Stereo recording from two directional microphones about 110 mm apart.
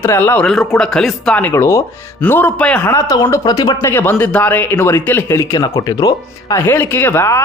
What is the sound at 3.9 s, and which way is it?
Speech, 20° left (ahead or behind).